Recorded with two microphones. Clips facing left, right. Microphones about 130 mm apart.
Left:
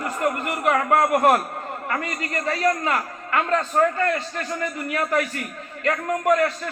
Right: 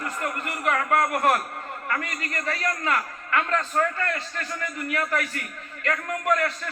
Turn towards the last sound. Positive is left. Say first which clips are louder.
# left 5 dB
turn(degrees=30)  # may be behind; listen again after turning